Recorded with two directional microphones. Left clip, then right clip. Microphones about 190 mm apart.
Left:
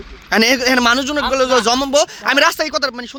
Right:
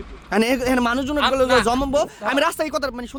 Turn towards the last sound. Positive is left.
turn(degrees=5)  # may be behind; listen again after turning